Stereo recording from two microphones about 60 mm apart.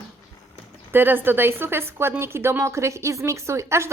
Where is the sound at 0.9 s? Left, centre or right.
Right.